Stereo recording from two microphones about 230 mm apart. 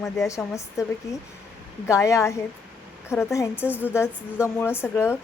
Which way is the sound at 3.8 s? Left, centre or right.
Centre.